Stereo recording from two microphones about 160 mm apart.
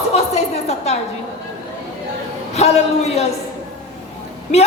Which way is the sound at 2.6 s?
40° left (ahead or behind).